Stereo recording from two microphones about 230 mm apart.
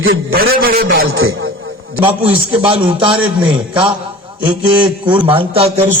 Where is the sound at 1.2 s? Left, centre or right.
Right.